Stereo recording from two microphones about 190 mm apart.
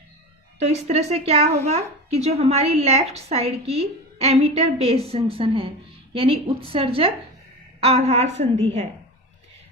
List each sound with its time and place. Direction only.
0.6 s a woman's voice: 35° right (ahead or behind)